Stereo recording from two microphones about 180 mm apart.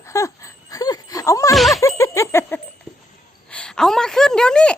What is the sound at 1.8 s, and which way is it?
Bicycle bell, 15° left (ahead or behind).